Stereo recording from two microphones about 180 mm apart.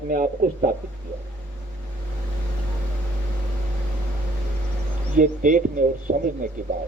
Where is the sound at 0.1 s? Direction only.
50° right (ahead or behind).